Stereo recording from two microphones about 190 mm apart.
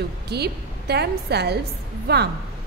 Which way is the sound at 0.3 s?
60° right (ahead or behind).